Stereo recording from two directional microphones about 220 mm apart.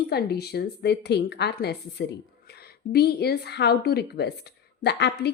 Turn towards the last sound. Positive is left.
turn(degrees=50)  # may be behind; listen again after turning